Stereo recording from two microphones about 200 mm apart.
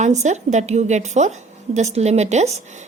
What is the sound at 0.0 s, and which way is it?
A woman's voice, 35° right (ahead or behind).